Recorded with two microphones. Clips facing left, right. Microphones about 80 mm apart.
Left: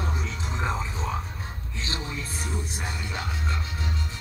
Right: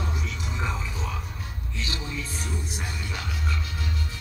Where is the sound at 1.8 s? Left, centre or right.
Left.